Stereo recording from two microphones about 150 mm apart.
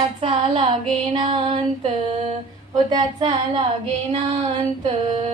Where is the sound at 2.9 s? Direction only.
30° right (ahead or behind).